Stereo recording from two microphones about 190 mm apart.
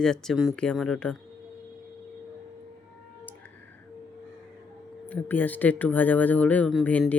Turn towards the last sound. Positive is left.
turn(degrees=10)  # may be behind; listen again after turning